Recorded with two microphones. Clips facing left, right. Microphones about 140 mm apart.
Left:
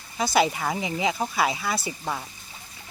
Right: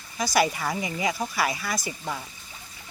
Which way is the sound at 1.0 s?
20° left (ahead or behind).